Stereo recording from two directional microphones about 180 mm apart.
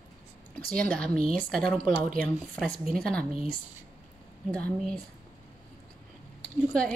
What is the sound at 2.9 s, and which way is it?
Speech, 5° left (ahead or behind).